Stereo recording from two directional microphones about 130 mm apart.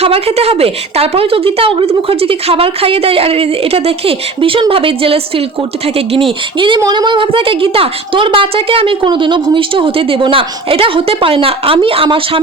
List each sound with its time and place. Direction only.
0.0 s a woman's voice: 50° right (ahead or behind)
6.6 s a woman's voice: 35° right (ahead or behind)